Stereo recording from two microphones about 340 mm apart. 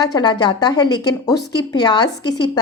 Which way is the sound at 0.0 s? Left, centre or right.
Centre.